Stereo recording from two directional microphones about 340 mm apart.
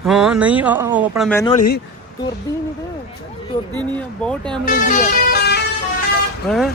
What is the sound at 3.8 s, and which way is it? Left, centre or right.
Speech, centre.